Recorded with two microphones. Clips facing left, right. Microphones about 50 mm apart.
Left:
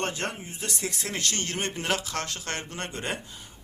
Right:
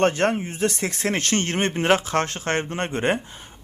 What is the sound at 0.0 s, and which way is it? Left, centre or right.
Speech, right.